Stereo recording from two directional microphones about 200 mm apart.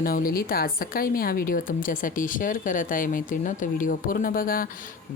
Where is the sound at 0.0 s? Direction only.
45° left (ahead or behind).